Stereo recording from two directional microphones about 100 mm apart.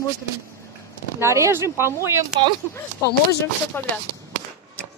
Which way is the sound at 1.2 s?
30° right (ahead or behind).